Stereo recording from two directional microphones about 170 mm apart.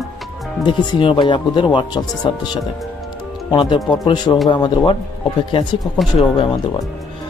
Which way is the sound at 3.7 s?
Centre (ahead or behind).